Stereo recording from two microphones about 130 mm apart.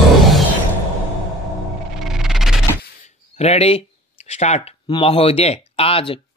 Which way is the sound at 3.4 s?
55° left (ahead or behind).